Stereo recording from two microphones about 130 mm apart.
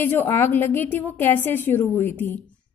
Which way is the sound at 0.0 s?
15° left (ahead or behind).